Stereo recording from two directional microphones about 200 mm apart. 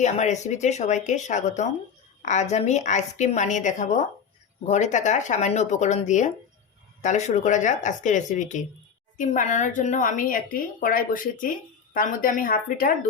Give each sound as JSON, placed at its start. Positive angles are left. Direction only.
{"t": 0.0, "sound": "a woman's voice", "side_deg": 35}